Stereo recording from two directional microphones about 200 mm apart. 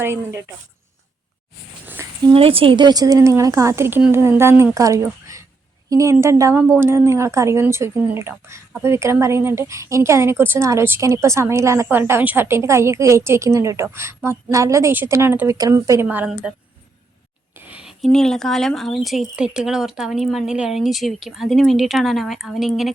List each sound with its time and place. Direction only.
0.0 s speech: 15° right (ahead or behind)
1.9 s a sound: 15° right (ahead or behind)
2.3 s speech: 30° right (ahead or behind); by 16.6 s 5° right (ahead or behind)
17.6 s speech: 5° right (ahead or behind)